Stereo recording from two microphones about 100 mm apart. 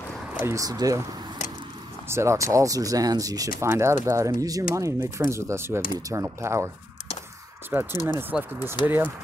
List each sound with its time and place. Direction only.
0.4 s speech: 25° right (ahead or behind)
0.7 s speech: 35° right (ahead or behind)
2.0 s speech: 30° right (ahead or behind)
7.7 s speech: 25° right (ahead or behind)